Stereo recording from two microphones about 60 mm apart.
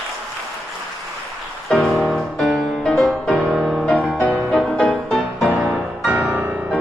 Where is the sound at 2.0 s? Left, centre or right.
Centre.